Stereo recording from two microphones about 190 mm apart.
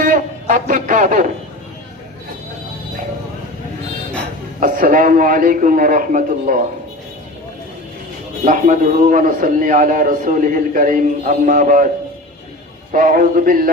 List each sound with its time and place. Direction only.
0.0 s a sound: 45° right (ahead or behind)
4.6 s a man's voice: 45° right (ahead or behind)
8.4 s a man's voice: 40° right (ahead or behind)
12.9 s a man's voice: 45° right (ahead or behind)